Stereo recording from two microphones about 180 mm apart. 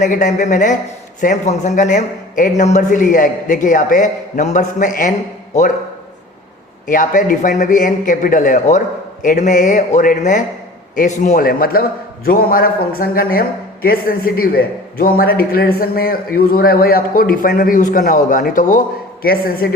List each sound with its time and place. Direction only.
0.0 s a man's voice: 45° left (ahead or behind)
6.8 s a man's voice: 45° left (ahead or behind)